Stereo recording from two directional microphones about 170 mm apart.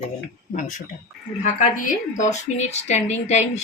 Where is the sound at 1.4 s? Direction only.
50° left (ahead or behind).